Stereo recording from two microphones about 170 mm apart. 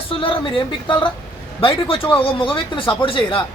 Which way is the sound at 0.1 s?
30° left (ahead or behind).